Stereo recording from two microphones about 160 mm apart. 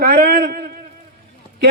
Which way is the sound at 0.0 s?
85° right.